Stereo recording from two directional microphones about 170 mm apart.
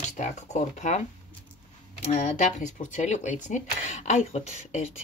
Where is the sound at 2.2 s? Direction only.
45° left (ahead or behind).